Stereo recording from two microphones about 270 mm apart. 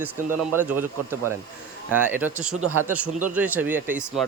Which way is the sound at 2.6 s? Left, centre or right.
Right.